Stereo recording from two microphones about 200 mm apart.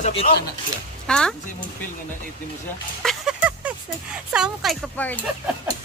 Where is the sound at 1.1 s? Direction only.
5° left (ahead or behind).